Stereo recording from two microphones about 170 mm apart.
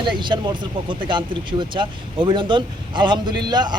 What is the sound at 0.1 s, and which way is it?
Speech, 25° right (ahead or behind).